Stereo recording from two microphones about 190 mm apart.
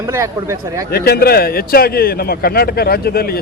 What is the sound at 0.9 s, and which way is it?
A man's voice, 55° left (ahead or behind).